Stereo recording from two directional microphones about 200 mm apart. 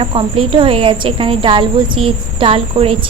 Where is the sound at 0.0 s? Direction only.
25° right (ahead or behind).